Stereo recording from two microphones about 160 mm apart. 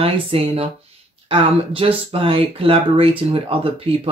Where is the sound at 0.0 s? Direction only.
40° right (ahead or behind).